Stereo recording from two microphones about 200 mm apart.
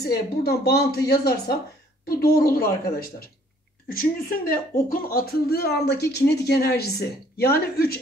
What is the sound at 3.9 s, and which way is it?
Speech, 45° left (ahead or behind).